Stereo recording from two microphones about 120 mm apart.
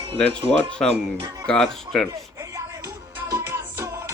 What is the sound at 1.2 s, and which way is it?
Speech, 25° right (ahead or behind).